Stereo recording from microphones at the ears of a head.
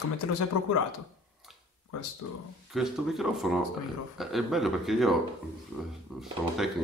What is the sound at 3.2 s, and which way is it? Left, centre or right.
Speech, centre.